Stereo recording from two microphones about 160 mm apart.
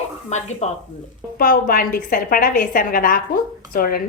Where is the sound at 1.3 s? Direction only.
65° left (ahead or behind).